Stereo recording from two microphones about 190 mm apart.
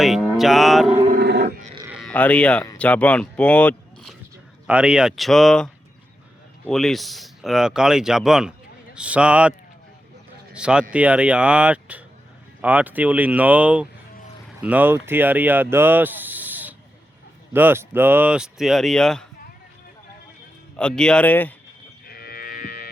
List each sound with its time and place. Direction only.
0.0 s music: centre (ahead or behind)
1.2 s grunt: 60° right (ahead or behind)
1.9 s speech: centre (ahead or behind)
4.6 s speech: 5° right (ahead or behind)
20.7 s speech: 5° left (ahead or behind)
22.0 s cattle: 55° left (ahead or behind)